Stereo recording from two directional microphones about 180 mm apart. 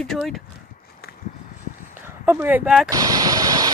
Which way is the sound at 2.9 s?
20° right (ahead or behind).